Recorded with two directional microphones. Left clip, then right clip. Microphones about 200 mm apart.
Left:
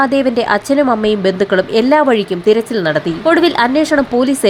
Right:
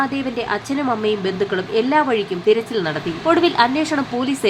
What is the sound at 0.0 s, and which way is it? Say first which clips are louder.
A woman's voice: left 9 dB; 30° left (ahead or behind).